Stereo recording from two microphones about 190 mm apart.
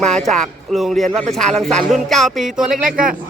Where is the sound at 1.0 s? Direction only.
40° right (ahead or behind).